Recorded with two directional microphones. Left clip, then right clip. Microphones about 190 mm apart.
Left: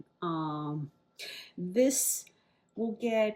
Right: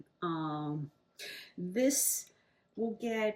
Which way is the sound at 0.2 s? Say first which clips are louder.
Left 2 dB; 35° left (ahead or behind).